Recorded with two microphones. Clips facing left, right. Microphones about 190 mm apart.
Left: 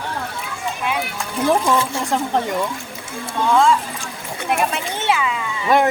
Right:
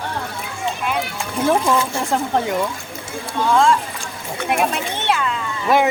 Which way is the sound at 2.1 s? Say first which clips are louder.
Right 1 dB; centre (ahead or behind).